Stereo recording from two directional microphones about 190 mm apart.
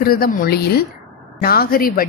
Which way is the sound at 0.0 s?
50° left (ahead or behind).